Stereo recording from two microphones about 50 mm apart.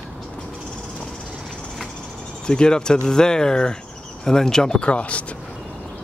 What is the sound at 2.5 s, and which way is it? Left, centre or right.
Speech, centre.